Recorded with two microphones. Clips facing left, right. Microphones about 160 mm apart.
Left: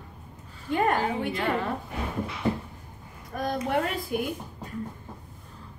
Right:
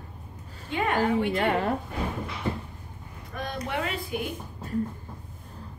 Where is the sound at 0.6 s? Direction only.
45° left (ahead or behind).